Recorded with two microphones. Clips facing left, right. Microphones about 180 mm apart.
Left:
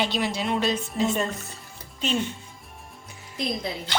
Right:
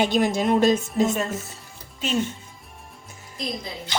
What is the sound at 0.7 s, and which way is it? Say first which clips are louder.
Speech: right 4 dB; 5° right (ahead or behind).